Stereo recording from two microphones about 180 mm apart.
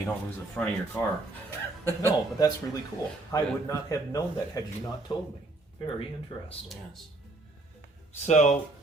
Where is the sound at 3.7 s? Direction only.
20° left (ahead or behind).